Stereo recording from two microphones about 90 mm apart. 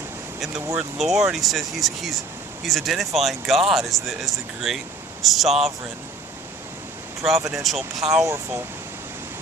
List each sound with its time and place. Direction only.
0.3 s speech: 5° right (ahead or behind)
7.2 s speech: centre (ahead or behind)
8.2 s speech: 30° right (ahead or behind)